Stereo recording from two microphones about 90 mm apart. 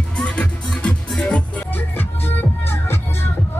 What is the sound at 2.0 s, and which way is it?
Music, 25° left (ahead or behind).